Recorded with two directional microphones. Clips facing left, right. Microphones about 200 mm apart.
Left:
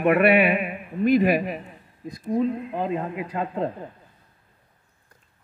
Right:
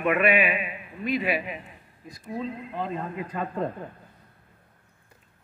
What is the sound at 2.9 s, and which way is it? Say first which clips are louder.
Speech: left 4 dB; 15° left (ahead or behind).